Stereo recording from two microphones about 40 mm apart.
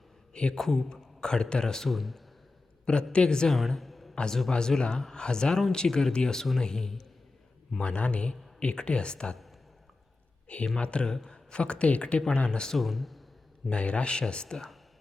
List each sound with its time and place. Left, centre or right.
0.5 s a man's voice: centre
1.9 s a man's voice: centre
2.8 s speech: left
3.5 s a sound: centre
4.1 s a man's voice: left; by 7.1 s centre
7.8 s speech: left
10.8 s speech: left
12.7 s a man's voice: centre
13.7 s speech: left